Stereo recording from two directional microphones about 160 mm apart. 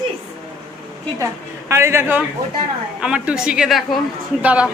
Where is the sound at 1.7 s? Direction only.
15° right (ahead or behind).